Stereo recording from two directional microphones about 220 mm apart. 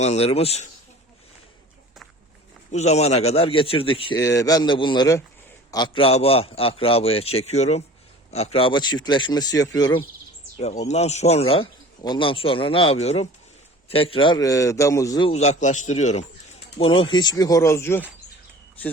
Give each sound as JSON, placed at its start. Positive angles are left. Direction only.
{"t": 0.0, "sound": "speech", "side_deg": 30}
{"t": 2.7, "sound": "speech", "side_deg": 30}
{"t": 10.6, "sound": "a man's voice", "side_deg": 30}
{"t": 15.3, "sound": "a man's voice", "side_deg": 30}